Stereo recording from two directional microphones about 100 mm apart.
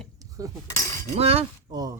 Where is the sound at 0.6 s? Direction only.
30° left (ahead or behind).